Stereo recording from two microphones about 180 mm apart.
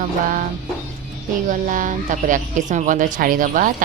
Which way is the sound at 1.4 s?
45° right (ahead or behind).